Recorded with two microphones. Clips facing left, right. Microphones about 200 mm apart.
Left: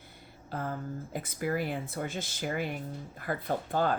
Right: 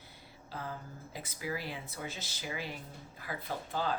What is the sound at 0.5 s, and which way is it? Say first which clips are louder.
Speech: left 7 dB; 50° left (ahead or behind).